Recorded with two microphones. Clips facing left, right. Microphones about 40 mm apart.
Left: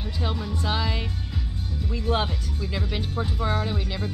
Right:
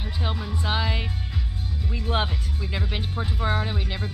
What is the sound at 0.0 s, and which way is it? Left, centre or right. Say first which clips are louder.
Speech: left 1 dB; centre.